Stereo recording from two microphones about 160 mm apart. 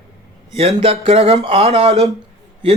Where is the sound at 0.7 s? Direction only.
35° right (ahead or behind).